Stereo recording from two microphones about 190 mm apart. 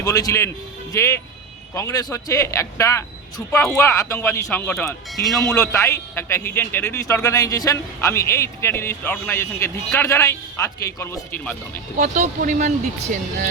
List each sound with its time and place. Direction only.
0.0 s a man's voice: 20° left (ahead or behind)
5.5 s a man's voice: 15° left (ahead or behind)
11.9 s speech: 40° right (ahead or behind)